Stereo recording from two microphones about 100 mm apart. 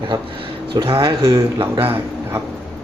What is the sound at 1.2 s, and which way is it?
Speech, 35° right (ahead or behind).